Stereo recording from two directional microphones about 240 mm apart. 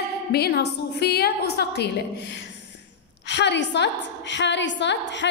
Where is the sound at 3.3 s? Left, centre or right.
Left.